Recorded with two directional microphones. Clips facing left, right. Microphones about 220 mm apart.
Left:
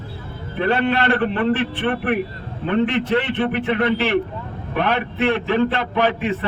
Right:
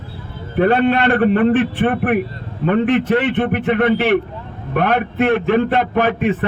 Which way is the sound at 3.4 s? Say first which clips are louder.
Right 3 dB; 50° right (ahead or behind).